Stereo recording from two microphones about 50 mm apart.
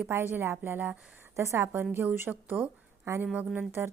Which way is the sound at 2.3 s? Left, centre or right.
Right.